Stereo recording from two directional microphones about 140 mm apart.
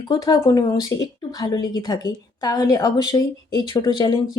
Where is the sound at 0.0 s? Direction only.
25° left (ahead or behind).